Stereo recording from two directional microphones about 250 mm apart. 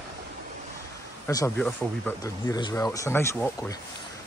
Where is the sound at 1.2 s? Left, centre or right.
Centre.